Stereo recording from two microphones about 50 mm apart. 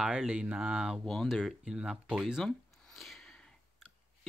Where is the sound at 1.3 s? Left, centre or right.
Centre.